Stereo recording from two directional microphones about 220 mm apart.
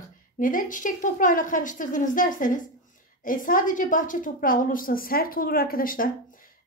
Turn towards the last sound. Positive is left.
turn(degrees=40)  # may be behind; listen again after turning